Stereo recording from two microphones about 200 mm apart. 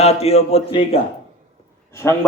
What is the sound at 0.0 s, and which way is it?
Speech, 30° left (ahead or behind).